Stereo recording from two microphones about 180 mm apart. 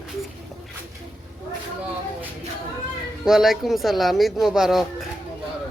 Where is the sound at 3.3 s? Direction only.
Centre (ahead or behind).